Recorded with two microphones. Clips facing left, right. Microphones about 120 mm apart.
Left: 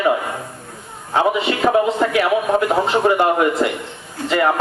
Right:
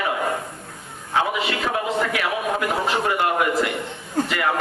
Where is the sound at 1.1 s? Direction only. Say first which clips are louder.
Left 5 dB; 30° left (ahead or behind).